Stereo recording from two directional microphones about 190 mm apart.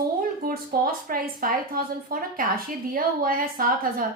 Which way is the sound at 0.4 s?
50° right (ahead or behind).